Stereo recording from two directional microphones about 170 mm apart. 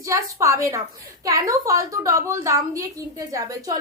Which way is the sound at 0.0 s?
20° right (ahead or behind).